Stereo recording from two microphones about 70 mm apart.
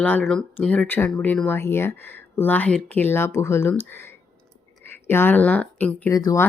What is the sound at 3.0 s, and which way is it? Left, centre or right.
Speech, left.